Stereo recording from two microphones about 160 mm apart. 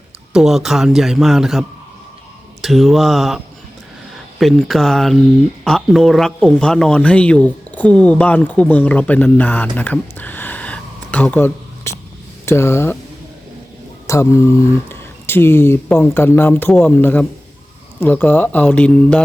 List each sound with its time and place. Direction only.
0.3 s speech: 5° right (ahead or behind)
9.7 s a sound: 10° left (ahead or behind)
12.5 s speech: 15° left (ahead or behind)
14.1 s speech: 15° left (ahead or behind)